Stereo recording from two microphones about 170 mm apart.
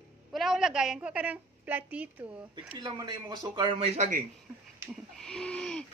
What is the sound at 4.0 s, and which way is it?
Speech, 50° right (ahead or behind).